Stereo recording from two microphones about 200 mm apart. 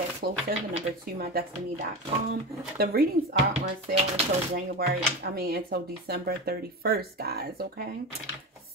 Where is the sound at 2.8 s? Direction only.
50° right (ahead or behind).